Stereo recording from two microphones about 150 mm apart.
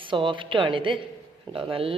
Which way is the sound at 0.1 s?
35° right (ahead or behind).